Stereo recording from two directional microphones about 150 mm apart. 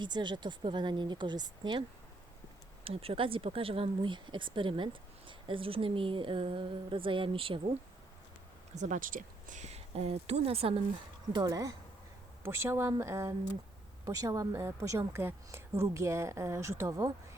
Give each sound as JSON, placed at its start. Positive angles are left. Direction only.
{"t": 0.0, "sound": "a woman's voice", "side_deg": -30}
{"t": 2.8, "sound": "a woman's voice", "side_deg": -40}
{"t": 8.7, "sound": "speech", "side_deg": -55}
{"t": 11.3, "sound": "a woman's voice", "side_deg": -25}